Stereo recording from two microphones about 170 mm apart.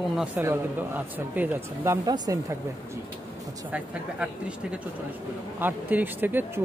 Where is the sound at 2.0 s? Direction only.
20° right (ahead or behind).